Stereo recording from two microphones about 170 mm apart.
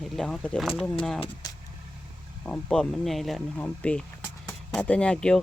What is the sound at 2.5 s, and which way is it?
Speech, 5° left (ahead or behind).